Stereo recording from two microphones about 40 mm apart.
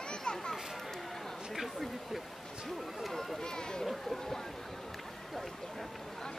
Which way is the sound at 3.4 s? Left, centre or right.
Centre.